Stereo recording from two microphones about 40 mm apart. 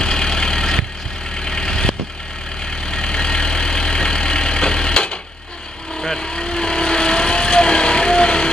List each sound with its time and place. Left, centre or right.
0.0 s vehicle: centre